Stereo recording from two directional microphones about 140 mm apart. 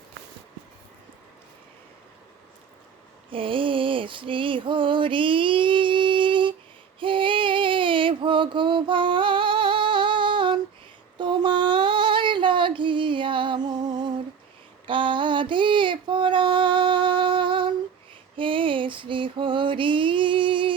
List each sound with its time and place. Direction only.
3.2 s mantra: 40° right (ahead or behind)
7.0 s female singing: 40° right (ahead or behind)
18.3 s mantra: 40° right (ahead or behind)